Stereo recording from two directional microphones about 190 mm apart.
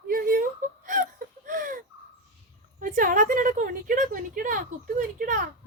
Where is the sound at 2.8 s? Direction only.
45° right (ahead or behind).